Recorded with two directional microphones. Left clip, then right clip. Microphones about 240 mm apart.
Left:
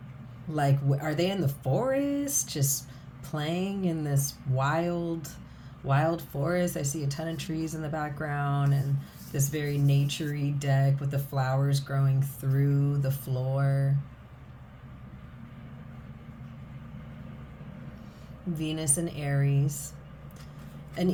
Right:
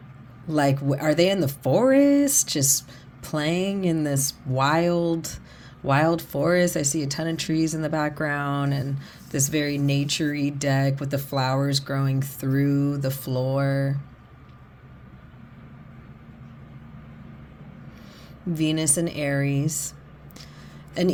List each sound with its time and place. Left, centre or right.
0.4 s speech: right
18.5 s speech: right